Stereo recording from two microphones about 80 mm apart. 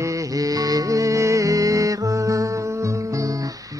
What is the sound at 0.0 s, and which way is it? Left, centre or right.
Music, right.